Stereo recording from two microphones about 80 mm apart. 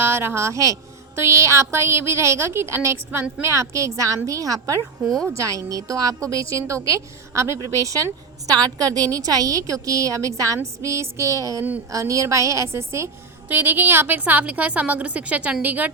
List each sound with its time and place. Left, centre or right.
0.0 s a woman's voice: right
5.0 s speech: centre
5.4 s a woman's voice: right
13.5 s a woman's voice: right